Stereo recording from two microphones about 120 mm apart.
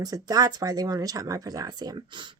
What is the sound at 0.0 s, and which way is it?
A woman's voice, 35° right (ahead or behind).